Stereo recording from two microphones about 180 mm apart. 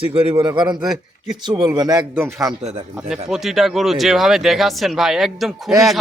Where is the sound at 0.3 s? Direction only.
25° right (ahead or behind).